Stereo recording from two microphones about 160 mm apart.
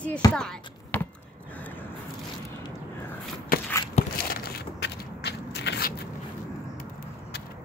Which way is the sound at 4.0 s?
45° left (ahead or behind).